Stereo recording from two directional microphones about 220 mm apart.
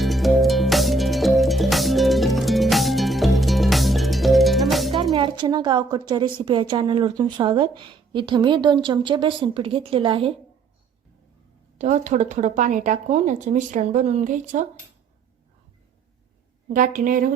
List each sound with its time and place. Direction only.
0.0 s music: centre (ahead or behind)
5.1 s a woman's voice: 20° right (ahead or behind)
11.8 s speech: 35° right (ahead or behind)
16.7 s speech: 35° right (ahead or behind)